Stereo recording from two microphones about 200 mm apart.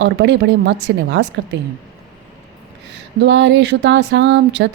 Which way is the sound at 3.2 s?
60° right (ahead or behind).